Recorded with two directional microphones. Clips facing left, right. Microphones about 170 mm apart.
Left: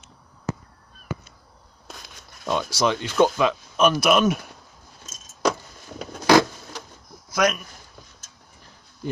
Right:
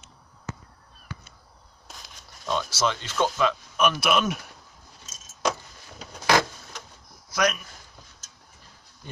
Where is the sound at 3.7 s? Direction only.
35° left (ahead or behind).